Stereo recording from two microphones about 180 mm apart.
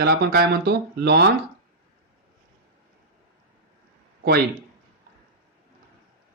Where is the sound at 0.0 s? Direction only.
60° right (ahead or behind).